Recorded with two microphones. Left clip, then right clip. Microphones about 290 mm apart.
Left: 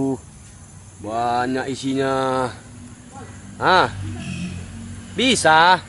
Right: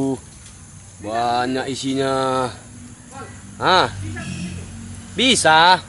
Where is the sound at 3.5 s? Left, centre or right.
Centre.